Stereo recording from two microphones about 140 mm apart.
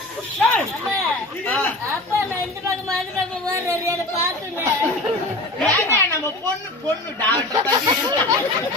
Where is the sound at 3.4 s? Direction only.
20° right (ahead or behind).